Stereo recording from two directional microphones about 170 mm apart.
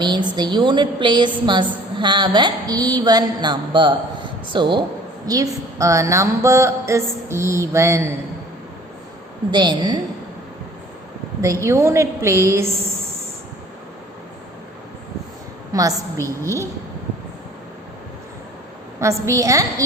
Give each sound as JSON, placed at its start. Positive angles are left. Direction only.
{"t": 0.0, "sound": "a woman's voice", "side_deg": -25}
{"t": 9.5, "sound": "a woman's voice", "side_deg": -25}
{"t": 11.3, "sound": "a woman's voice", "side_deg": -15}
{"t": 15.7, "sound": "a woman's voice", "side_deg": -20}
{"t": 18.9, "sound": "a woman's voice", "side_deg": -15}